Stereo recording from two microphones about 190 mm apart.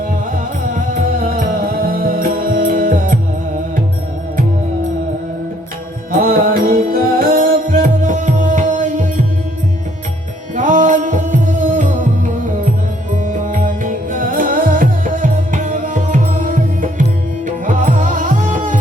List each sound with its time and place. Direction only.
0.3 s music: 45° right (ahead or behind)
6.1 s music: 50° right (ahead or behind)
10.5 s music: 40° right (ahead or behind)